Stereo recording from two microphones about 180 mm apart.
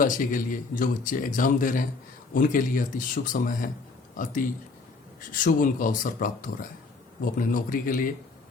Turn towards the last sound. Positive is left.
turn(degrees=50)  # may be behind; listen again after turning